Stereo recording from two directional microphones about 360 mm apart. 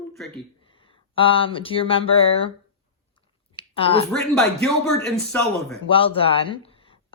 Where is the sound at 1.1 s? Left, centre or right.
Centre.